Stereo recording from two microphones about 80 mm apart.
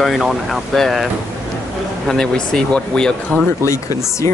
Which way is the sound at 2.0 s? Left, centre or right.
Centre.